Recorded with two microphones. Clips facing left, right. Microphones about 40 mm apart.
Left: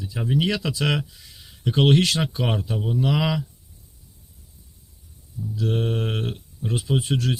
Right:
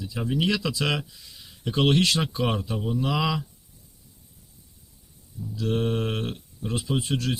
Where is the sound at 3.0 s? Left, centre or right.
Left.